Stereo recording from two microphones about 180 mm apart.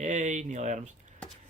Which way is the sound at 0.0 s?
45° right (ahead or behind).